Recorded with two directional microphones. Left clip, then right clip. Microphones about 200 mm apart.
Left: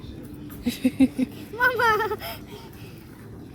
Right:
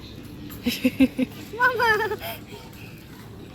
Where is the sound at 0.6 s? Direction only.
5° left (ahead or behind).